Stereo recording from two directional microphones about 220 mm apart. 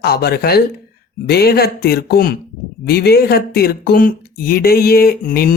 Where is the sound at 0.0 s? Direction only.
45° left (ahead or behind).